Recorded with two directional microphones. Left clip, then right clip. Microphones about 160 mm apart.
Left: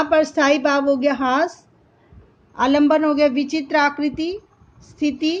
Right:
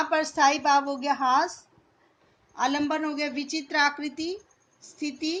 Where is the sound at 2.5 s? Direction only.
50° left (ahead or behind).